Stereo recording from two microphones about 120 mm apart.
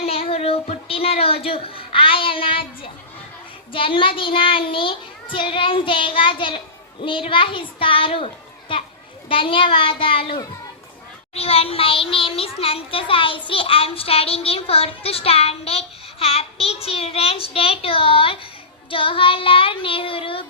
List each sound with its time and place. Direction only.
0.0 s child singing: 50° left (ahead or behind)
3.7 s a child's voice: 45° left (ahead or behind)